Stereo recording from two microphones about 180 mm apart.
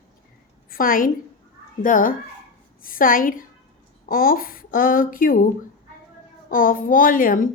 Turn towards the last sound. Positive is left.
turn(degrees=50)  # may be behind; listen again after turning